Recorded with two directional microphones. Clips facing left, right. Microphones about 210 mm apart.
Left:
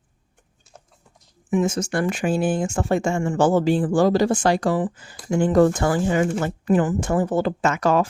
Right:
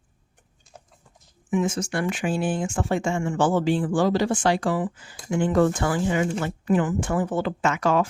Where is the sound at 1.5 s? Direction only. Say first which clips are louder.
Left 3 dB; 40° left (ahead or behind).